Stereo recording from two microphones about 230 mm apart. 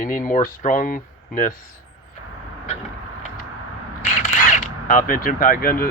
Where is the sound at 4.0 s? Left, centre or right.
Left.